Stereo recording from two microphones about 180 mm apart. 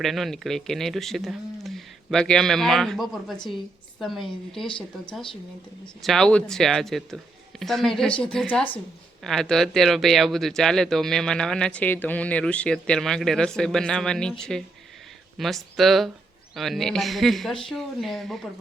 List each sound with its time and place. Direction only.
0.0 s speech: centre (ahead or behind)
3.3 s a woman's voice: 25° left (ahead or behind)
4.0 s speech: centre (ahead or behind)
6.0 s speech: centre (ahead or behind)